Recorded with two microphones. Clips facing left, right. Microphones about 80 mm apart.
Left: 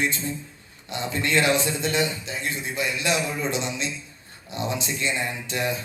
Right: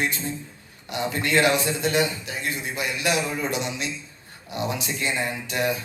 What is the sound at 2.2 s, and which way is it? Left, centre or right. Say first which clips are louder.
A man's voice: even; left.